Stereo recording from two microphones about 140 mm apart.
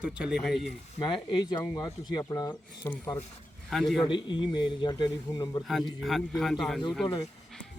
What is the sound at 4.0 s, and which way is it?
A man's voice, 35° left (ahead or behind).